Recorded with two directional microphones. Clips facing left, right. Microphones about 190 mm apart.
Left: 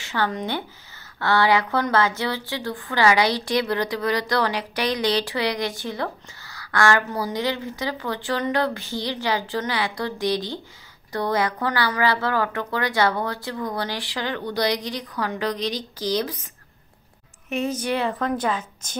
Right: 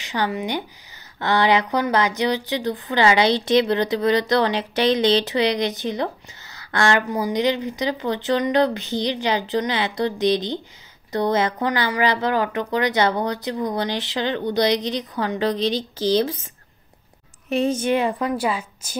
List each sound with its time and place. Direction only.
0.0 s a woman's voice: 15° right (ahead or behind)
17.5 s a woman's voice: 30° right (ahead or behind); by 18.9 s 10° right (ahead or behind)